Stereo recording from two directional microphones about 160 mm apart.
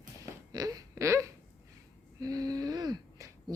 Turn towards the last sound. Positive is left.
turn(degrees=-20)  # may be behind; listen again after turning